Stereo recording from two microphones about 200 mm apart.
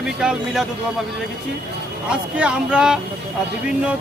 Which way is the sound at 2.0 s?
5° right (ahead or behind).